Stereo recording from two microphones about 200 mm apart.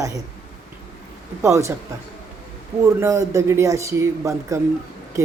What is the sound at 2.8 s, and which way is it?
Speech, 15° right (ahead or behind).